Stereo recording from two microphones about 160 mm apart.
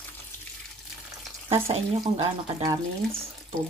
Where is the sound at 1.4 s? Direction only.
40° right (ahead or behind).